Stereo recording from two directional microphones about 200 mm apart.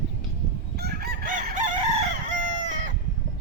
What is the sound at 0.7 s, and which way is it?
Chicken, 55° right (ahead or behind).